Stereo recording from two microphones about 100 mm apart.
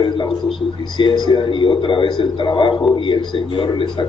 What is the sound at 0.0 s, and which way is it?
A man's voice, 55° left (ahead or behind).